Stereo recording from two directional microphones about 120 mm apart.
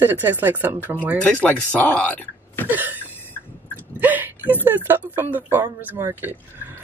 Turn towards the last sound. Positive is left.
turn(degrees=-20)  # may be behind; listen again after turning